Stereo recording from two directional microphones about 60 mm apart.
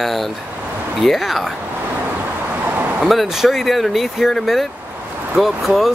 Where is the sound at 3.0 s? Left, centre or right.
Centre.